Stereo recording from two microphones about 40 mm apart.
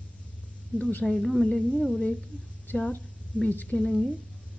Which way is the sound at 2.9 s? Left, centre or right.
Left.